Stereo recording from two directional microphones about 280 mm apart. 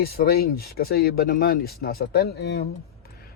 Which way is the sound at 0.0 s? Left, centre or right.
Left.